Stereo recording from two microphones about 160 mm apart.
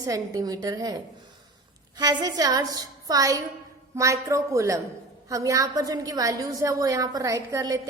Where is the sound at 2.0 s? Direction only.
25° right (ahead or behind).